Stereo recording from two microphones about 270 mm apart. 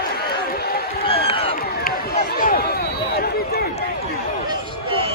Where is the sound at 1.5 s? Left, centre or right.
Left.